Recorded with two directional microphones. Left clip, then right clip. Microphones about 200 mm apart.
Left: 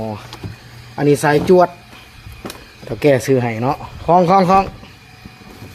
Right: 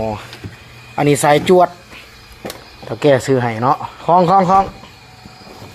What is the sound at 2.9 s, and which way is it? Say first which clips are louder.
Speech: right 1 dB; 25° left (ahead or behind).